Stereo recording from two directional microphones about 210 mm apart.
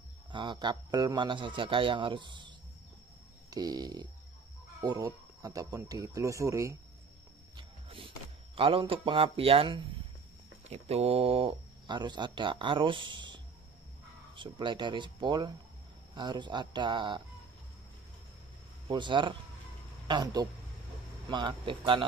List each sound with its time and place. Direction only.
0.3 s speech: 20° right (ahead or behind)
7.5 s music: 25° right (ahead or behind)
8.5 s speech: 25° right (ahead or behind)
18.9 s speech: 20° right (ahead or behind)